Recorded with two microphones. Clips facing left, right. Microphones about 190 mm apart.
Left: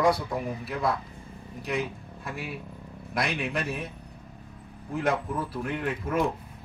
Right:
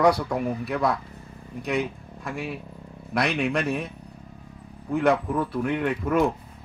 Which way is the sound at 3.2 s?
65° right (ahead or behind).